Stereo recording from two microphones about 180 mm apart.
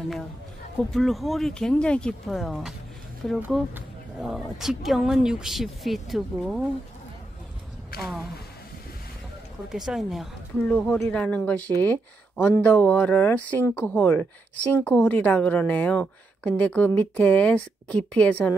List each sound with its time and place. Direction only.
0.9 s speech: centre (ahead or behind)
7.9 s speech: 60° left (ahead or behind)
9.7 s speech: 5° right (ahead or behind)